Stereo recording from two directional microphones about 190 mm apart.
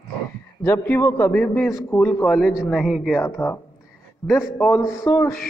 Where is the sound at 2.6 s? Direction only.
Centre (ahead or behind).